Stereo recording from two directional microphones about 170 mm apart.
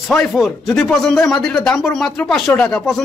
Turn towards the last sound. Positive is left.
turn(degrees=5)  # may be behind; listen again after turning